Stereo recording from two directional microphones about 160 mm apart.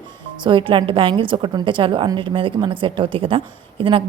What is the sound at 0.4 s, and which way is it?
A woman's voice, 30° right (ahead or behind).